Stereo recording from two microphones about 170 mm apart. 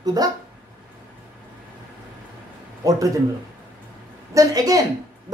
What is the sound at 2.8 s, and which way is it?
Speech, 20° right (ahead or behind).